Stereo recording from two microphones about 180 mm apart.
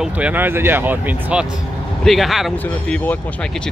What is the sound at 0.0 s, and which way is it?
Speech, 10° right (ahead or behind).